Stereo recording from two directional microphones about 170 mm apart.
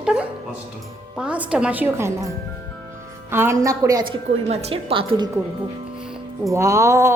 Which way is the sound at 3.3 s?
15° right (ahead or behind).